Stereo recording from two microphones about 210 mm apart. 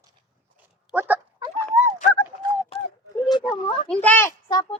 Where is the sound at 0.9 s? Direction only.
10° right (ahead or behind).